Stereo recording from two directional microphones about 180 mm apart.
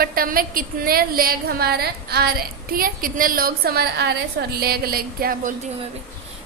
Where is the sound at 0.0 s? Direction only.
55° right (ahead or behind).